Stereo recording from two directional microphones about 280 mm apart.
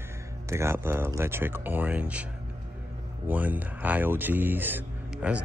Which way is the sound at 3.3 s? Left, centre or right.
Centre.